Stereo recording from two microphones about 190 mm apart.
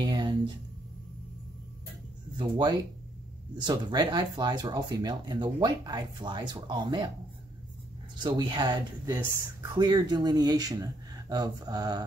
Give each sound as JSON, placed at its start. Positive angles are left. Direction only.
{"t": 0.0, "sound": "a sound", "side_deg": -20}
{"t": 2.3, "sound": "speech", "side_deg": -25}
{"t": 8.2, "sound": "speech", "side_deg": -25}